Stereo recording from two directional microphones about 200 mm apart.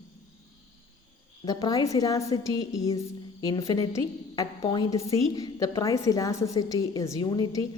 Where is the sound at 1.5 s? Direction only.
20° left (ahead or behind).